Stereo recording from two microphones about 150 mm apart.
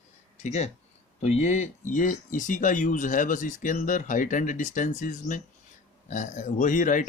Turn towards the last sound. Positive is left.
turn(degrees=60)  # may be behind; listen again after turning